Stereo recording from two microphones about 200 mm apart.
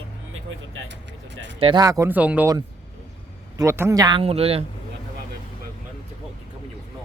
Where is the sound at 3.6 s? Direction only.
15° right (ahead or behind); by 4.7 s 30° right (ahead or behind).